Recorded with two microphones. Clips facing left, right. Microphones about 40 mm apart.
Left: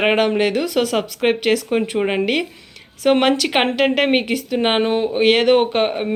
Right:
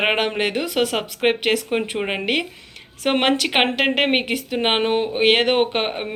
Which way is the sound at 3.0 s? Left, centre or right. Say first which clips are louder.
Left 4 dB; right.